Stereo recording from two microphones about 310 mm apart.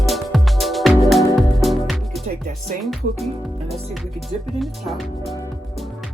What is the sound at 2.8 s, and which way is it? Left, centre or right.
Speech, centre.